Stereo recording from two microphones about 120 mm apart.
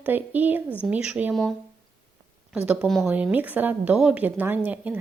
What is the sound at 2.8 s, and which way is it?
Speech, 5° left (ahead or behind).